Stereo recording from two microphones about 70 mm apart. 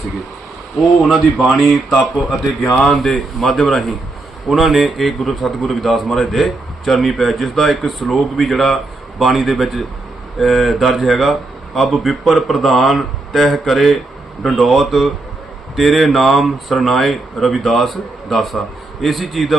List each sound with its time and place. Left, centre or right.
1.0 s a man's voice: centre